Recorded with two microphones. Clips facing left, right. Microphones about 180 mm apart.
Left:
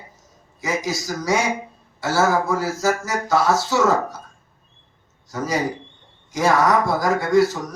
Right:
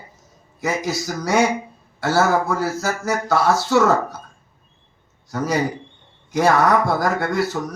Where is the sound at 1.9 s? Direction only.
60° right (ahead or behind).